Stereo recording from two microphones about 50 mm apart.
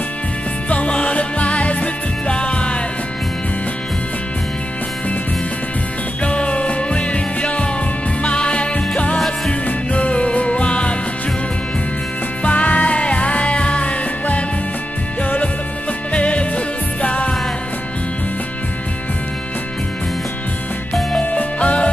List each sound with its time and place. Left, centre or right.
0.7 s music: left
6.2 s music: left
12.4 s music: left
21.2 s music: left